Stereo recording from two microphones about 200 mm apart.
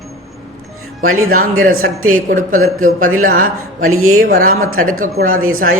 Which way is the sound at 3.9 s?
90° right.